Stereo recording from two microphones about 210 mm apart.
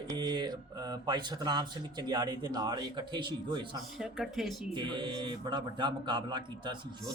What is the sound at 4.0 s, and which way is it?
Speech, centre (ahead or behind).